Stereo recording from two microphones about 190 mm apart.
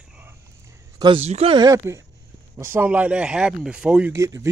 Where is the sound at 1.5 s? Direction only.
15° right (ahead or behind).